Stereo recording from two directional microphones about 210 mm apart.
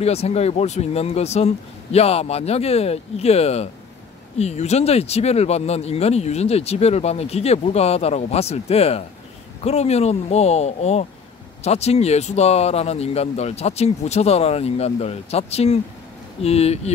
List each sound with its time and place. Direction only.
0.0 s speech: 30° left (ahead or behind)